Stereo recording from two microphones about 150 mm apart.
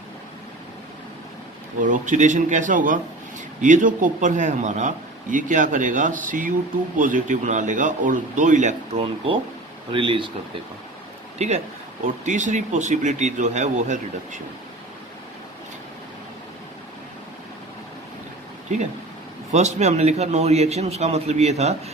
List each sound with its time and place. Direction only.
1.8 s a man's voice: 60° right (ahead or behind)
9.0 s speech: 40° right (ahead or behind)
11.3 s a man's voice: 45° right (ahead or behind)
19.5 s a man's voice: 50° right (ahead or behind)